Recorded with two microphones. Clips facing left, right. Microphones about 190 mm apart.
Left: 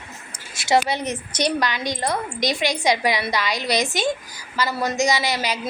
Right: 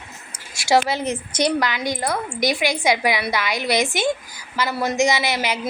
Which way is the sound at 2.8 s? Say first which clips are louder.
Even; 10° right (ahead or behind).